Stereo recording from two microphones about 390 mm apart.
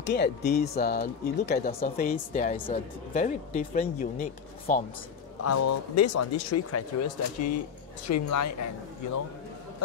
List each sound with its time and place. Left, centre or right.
0.0 s speech: left
5.4 s speech: left